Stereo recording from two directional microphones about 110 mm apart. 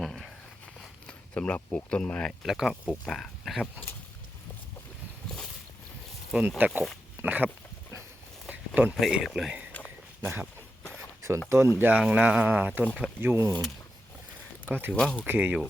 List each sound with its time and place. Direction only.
0.0 s a sound: centre (ahead or behind)
0.8 s speech: 10° left (ahead or behind)
2.4 s speech: 5° right (ahead or behind)
6.6 s speech: 15° right (ahead or behind)
8.4 s a sound: 10° right (ahead or behind)
9.0 s speech: centre (ahead or behind)
10.9 s a sound: 25° right (ahead or behind)
11.4 s speech: 25° right (ahead or behind)
14.7 s speech: 20° right (ahead or behind)
14.9 s speech: 10° left (ahead or behind)
15.3 s speech: 15° right (ahead or behind)